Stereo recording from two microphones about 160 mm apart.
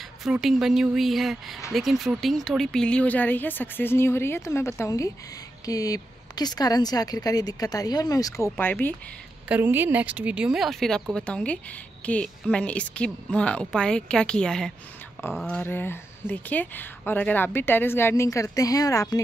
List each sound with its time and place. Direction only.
0.2 s speech: centre (ahead or behind)
9.5 s speech: 15° right (ahead or behind); by 19.2 s 20° left (ahead or behind)